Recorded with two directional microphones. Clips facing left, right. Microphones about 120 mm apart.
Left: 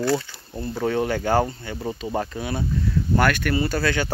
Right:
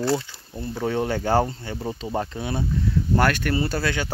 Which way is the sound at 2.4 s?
25° right (ahead or behind).